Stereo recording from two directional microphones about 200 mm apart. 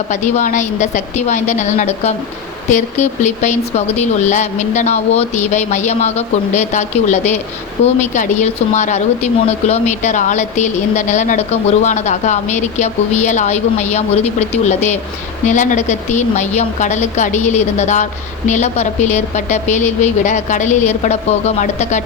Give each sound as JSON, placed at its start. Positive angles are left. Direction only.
{"t": 0.1, "sound": "speech", "side_deg": 35}